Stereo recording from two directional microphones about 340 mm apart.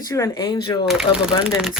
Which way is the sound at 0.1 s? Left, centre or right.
Centre.